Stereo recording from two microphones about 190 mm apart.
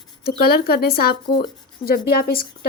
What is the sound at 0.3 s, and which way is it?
Speech, 55° left (ahead or behind).